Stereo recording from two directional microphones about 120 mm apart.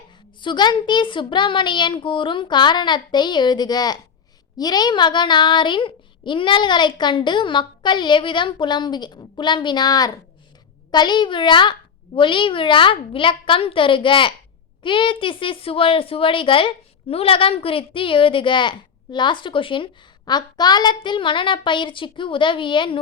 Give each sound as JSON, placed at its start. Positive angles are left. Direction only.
{"t": 0.4, "sound": "a woman's voice", "side_deg": 40}